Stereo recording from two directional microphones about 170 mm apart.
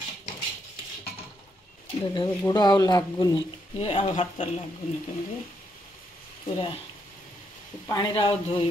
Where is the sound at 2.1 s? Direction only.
25° left (ahead or behind).